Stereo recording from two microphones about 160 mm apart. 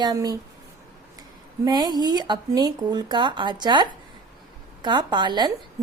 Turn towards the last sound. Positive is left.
turn(degrees=-25)  # may be behind; listen again after turning